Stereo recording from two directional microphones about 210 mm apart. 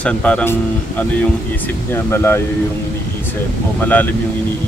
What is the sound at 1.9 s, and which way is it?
Speech, 10° left (ahead or behind).